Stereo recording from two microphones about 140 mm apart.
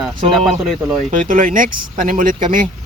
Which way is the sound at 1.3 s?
80° right.